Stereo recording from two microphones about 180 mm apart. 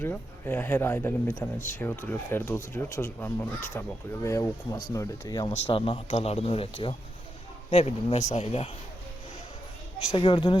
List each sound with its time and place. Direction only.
0.0 s speech: 10° left (ahead or behind)
5.6 s speech: 30° left (ahead or behind)
10.1 s speech: 30° left (ahead or behind)